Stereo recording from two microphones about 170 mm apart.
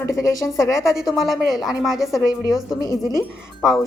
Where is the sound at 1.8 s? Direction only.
Centre (ahead or behind).